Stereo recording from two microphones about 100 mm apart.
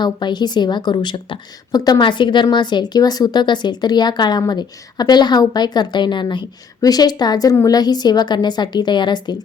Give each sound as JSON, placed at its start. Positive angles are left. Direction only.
{"t": 0.0, "sound": "a woman's voice", "side_deg": 45}